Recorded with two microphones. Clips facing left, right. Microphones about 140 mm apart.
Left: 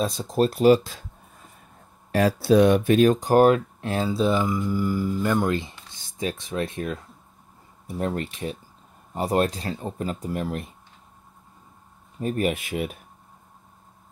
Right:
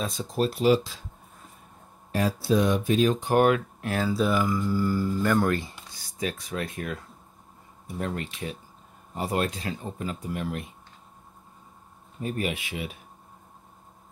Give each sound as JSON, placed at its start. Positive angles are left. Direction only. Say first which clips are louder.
{"t": 0.0, "sound": "speech", "louder": "left 5 dB", "side_deg": 40}
{"t": 0.6, "sound": "speech", "louder": "left 5 dB", "side_deg": 50}
{"t": 2.1, "sound": "speech", "louder": "left 6 dB", "side_deg": 70}
{"t": 7.8, "sound": "speech", "louder": "left 4 dB", "side_deg": 40}
{"t": 12.2, "sound": "speech", "louder": "left 5 dB", "side_deg": 45}